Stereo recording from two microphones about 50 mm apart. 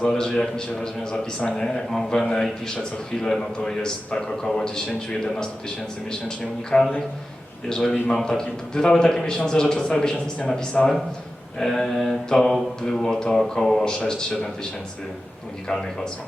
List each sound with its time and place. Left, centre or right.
0.1 s a man's voice: centre
15.6 s a man's voice: centre